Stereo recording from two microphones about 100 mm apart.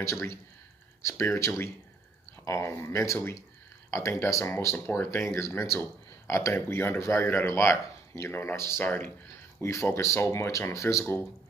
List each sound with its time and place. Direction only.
0.0 s speech: 30° left (ahead or behind)
9.6 s speech: 30° left (ahead or behind)